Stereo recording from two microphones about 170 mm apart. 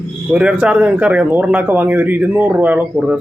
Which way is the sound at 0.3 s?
5° right (ahead or behind).